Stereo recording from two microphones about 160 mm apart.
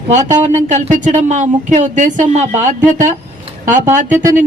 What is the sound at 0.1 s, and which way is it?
Speech, 50° right (ahead or behind).